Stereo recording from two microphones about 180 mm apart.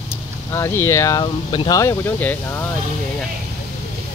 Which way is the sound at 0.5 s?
15° left (ahead or behind).